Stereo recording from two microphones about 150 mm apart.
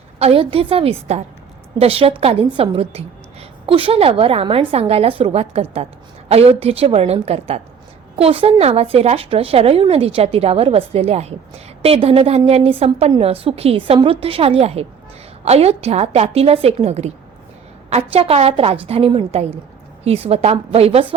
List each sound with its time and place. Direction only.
0.2 s a woman's voice: 40° right (ahead or behind)